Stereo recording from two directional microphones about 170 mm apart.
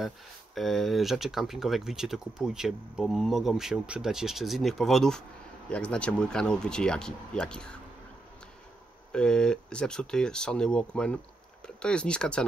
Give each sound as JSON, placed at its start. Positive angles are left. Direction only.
{"t": 0.6, "sound": "speech", "side_deg": 0}
{"t": 9.1, "sound": "speech", "side_deg": 5}